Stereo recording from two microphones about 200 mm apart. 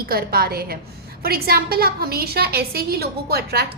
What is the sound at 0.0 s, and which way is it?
A woman's voice, 50° right (ahead or behind).